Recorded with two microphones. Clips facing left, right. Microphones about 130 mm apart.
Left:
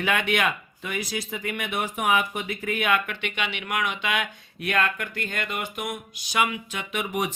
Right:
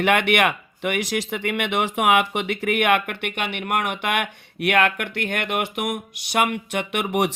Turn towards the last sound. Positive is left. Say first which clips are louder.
# right 5 dB
turn(degrees=-70)  # may be behind; listen again after turning